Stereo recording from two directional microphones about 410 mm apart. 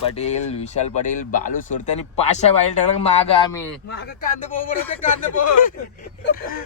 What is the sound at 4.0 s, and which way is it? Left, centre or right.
Speech, left.